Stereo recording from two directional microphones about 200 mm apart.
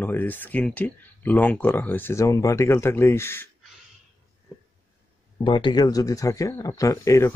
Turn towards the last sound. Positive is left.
turn(degrees=15)  # may be behind; listen again after turning